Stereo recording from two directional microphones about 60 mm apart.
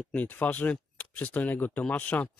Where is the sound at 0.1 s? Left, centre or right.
Left.